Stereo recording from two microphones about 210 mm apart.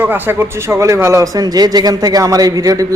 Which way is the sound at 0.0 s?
10° right (ahead or behind).